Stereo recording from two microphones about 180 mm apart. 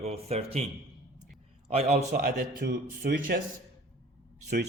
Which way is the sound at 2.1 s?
55° right (ahead or behind).